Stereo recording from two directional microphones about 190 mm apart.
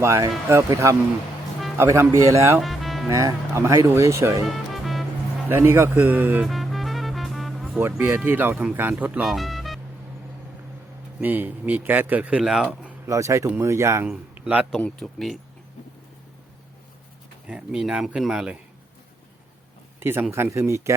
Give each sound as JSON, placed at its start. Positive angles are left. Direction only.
{"t": 0.0, "sound": "speech", "side_deg": -15}
{"t": 2.6, "sound": "music", "side_deg": 0}
{"t": 3.1, "sound": "speech", "side_deg": -15}
{"t": 4.4, "sound": "music", "side_deg": 0}
{"t": 5.5, "sound": "music", "side_deg": -10}
{"t": 7.8, "sound": "speech", "side_deg": -10}
{"t": 11.2, "sound": "speech", "side_deg": -10}
{"t": 13.1, "sound": "a man's voice", "side_deg": -15}
{"t": 17.4, "sound": "speech", "side_deg": -5}
{"t": 20.0, "sound": "speech", "side_deg": -10}